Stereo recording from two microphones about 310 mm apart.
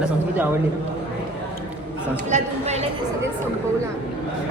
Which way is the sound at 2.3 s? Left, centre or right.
Right.